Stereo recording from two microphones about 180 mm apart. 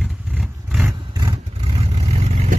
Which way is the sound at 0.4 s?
10° right (ahead or behind).